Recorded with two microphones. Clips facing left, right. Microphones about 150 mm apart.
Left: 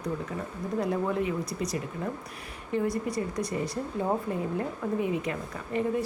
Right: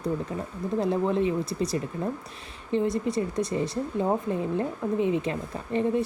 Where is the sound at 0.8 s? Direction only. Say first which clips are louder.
Right 4 dB; 25° right (ahead or behind).